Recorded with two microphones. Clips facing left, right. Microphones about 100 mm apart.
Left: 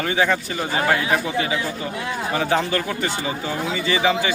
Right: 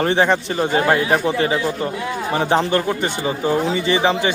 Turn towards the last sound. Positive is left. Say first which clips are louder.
# right 3 dB
turn(degrees=-25)  # may be behind; listen again after turning